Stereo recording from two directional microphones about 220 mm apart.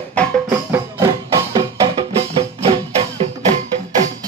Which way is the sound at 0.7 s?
15° right (ahead or behind).